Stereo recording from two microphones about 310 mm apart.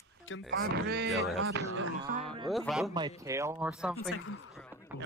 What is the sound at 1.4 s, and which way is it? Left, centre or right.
Speech, right.